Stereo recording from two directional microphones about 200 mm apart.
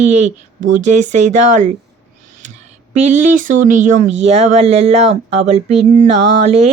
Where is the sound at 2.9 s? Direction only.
35° right (ahead or behind).